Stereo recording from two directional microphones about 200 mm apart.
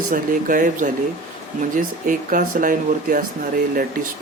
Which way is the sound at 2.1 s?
40° right (ahead or behind).